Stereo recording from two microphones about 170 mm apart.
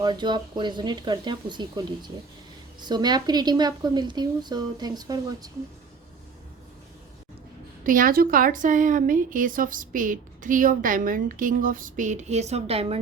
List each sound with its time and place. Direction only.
0.0 s speech: 25° right (ahead or behind)
7.9 s a woman's voice: 55° right (ahead or behind); by 13.0 s 35° right (ahead or behind)